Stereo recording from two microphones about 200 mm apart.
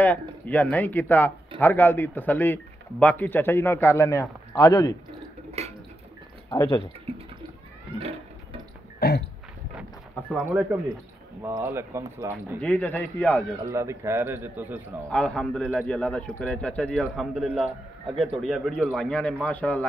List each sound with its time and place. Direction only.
0.0 s speech: 10° left (ahead or behind)
5.6 s a sound: 35° right (ahead or behind)
6.5 s speech: 20° left (ahead or behind)
7.1 s speech: 30° right (ahead or behind)
9.0 s a sound: 50° left (ahead or behind)
10.4 s speech: 10° right (ahead or behind)
12.5 s speech: 5° left (ahead or behind)
13.7 s speech: 15° right (ahead or behind)
15.0 s a man's voice: 5° left (ahead or behind)